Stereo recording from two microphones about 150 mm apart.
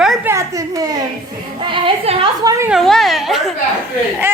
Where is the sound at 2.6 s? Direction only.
Centre (ahead or behind).